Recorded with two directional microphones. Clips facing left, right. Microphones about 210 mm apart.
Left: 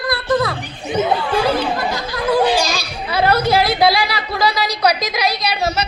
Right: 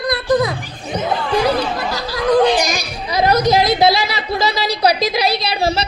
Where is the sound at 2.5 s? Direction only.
15° right (ahead or behind).